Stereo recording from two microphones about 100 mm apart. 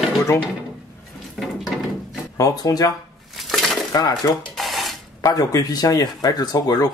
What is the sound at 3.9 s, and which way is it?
Speech, 40° left (ahead or behind).